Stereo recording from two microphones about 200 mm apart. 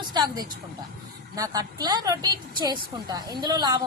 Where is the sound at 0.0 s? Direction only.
20° right (ahead or behind).